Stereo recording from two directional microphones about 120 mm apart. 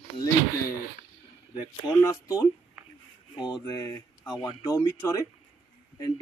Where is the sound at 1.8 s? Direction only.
25° left (ahead or behind).